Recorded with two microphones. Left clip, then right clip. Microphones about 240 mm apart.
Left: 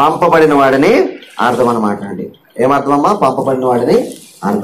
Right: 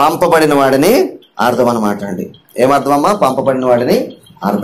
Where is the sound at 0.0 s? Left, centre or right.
Right.